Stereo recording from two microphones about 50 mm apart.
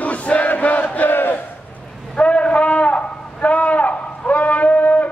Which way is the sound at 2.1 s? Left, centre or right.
Left.